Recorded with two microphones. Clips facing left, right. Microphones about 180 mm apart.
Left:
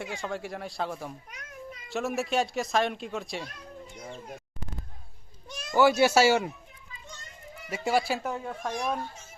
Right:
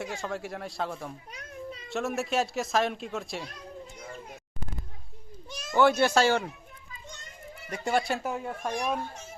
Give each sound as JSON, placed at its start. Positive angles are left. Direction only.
{"t": 0.0, "sound": "speech", "side_deg": 0}
{"t": 1.3, "sound": "children playing", "side_deg": -30}
{"t": 1.9, "sound": "speech", "side_deg": 0}
{"t": 5.5, "sound": "a child's voice", "side_deg": 0}
{"t": 7.7, "sound": "speech", "side_deg": 5}